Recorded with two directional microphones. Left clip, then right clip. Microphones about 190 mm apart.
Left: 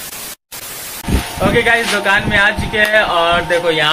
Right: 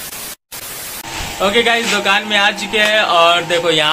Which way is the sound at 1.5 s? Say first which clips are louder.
Left 1 dB; 10° right (ahead or behind).